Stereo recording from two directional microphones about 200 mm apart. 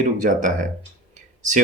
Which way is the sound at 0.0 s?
40° right (ahead or behind).